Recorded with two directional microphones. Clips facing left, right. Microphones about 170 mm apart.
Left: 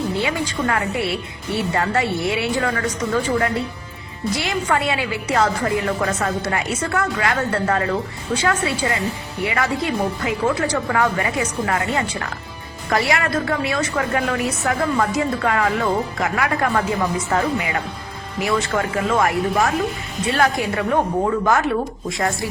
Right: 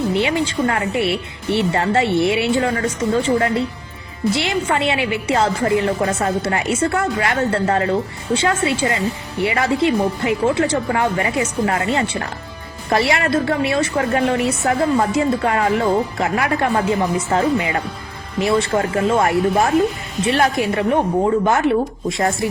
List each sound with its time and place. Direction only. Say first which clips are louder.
0.2 s a woman's voice: right 4 dB; 25° right (ahead or behind)